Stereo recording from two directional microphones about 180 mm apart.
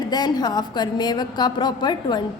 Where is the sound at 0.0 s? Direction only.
20° left (ahead or behind).